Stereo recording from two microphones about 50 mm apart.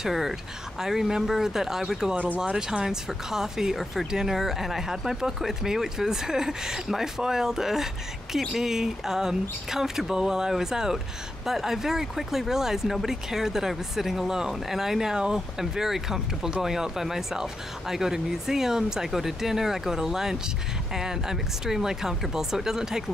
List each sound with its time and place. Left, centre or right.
0.0 s speech: centre
2.1 s speech: right
2.4 s speech: centre